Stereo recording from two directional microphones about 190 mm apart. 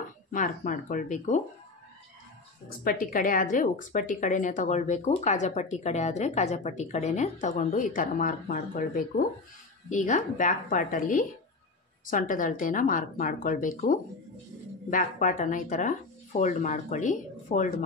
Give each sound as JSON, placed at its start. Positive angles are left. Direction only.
{"t": 0.3, "sound": "a woman's voice", "side_deg": 40}
{"t": 2.8, "sound": "a woman's voice", "side_deg": 50}